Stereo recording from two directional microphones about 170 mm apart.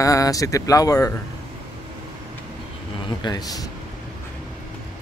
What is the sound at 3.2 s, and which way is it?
Speech, 25° left (ahead or behind).